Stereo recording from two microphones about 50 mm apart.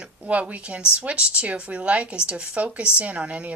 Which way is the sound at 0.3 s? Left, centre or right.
Right.